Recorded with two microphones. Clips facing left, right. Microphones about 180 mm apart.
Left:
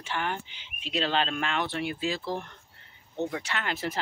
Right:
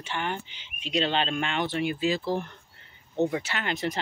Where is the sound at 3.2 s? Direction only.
20° right (ahead or behind).